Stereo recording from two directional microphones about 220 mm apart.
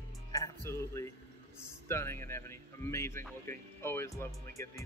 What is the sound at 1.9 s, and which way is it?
Speech, 10° left (ahead or behind).